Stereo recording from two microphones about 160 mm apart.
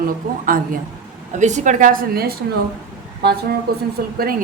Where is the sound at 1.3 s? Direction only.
50° right (ahead or behind); by 2.4 s 70° right (ahead or behind).